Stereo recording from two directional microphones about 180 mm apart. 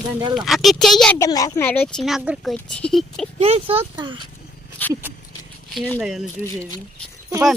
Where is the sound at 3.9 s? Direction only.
25° right (ahead or behind).